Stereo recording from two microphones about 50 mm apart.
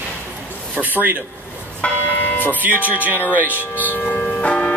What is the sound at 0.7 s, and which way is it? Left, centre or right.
Speech, right.